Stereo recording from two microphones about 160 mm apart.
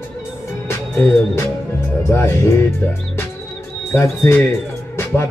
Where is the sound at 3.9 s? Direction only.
15° left (ahead or behind).